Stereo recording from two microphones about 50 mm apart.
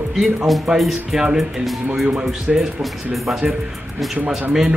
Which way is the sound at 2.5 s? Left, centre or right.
Centre.